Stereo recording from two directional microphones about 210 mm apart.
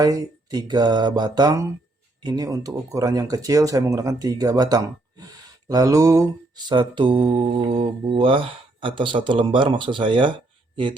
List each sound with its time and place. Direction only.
0.0 s speech: 20° right (ahead or behind)